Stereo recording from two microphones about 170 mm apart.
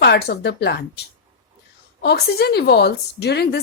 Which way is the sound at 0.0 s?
75° left (ahead or behind).